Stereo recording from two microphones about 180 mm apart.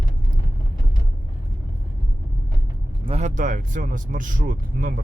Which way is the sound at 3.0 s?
35° right (ahead or behind).